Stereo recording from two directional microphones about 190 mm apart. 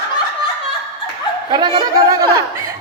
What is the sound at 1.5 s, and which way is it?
Speech, 25° right (ahead or behind).